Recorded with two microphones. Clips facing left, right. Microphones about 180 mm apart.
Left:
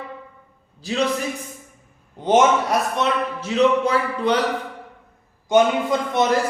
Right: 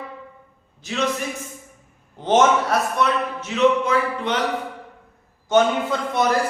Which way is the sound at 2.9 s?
20° left (ahead or behind).